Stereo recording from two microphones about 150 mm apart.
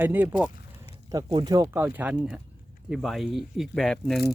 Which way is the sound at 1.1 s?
30° right (ahead or behind).